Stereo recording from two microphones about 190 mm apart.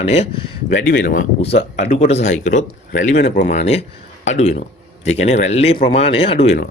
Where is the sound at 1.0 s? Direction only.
45° left (ahead or behind).